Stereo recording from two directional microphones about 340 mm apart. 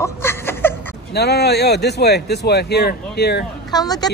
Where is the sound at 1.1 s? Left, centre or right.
Left.